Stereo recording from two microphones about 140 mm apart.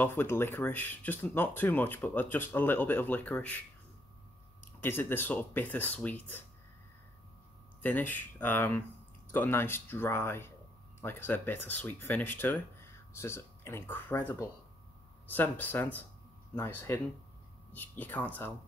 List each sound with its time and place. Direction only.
0.0 s speech: 15° left (ahead or behind)
4.7 s speech: 15° left (ahead or behind)
7.8 s speech: 15° left (ahead or behind)